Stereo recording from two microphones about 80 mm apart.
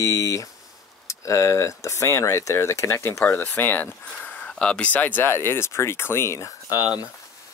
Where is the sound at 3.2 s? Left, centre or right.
Left.